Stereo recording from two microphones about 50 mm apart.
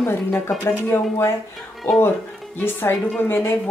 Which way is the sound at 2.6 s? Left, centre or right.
Left.